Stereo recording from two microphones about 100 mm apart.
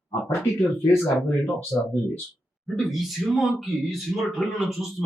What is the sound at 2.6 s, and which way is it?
A man's voice, centre (ahead or behind).